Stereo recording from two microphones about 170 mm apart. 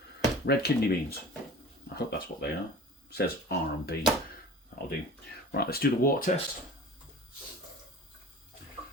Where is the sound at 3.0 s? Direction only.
70° left (ahead or behind).